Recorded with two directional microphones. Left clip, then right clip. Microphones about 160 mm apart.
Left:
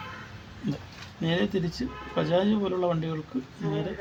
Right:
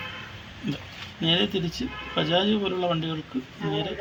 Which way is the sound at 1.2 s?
25° left (ahead or behind).